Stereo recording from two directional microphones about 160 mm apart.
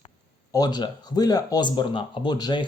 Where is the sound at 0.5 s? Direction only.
25° left (ahead or behind).